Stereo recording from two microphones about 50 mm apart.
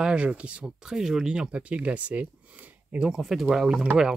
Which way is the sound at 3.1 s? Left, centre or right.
Centre.